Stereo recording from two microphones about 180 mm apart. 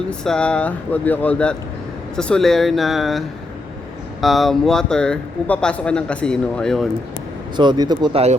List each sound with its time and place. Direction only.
0.1 s speech: 5° left (ahead or behind)
7.5 s speech: 25° right (ahead or behind)